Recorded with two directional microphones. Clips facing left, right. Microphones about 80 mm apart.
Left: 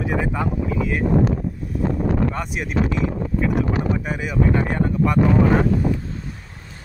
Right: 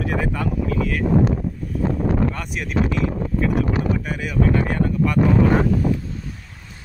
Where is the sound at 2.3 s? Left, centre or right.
Left.